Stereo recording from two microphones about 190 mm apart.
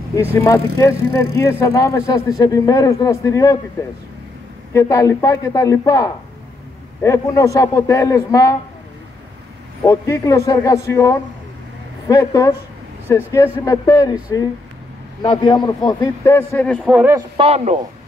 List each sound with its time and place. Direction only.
0.1 s speech: 10° left (ahead or behind)
4.7 s speech: 15° left (ahead or behind)
9.8 s speech: 15° left (ahead or behind)
15.2 s speech: 20° left (ahead or behind); by 17.2 s 5° right (ahead or behind)
17.4 s speech: 35° right (ahead or behind)